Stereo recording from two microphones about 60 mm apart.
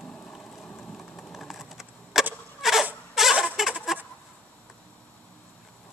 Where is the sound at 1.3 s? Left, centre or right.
Centre.